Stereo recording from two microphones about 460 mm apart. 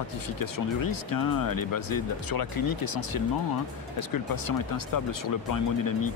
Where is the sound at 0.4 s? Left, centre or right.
Left.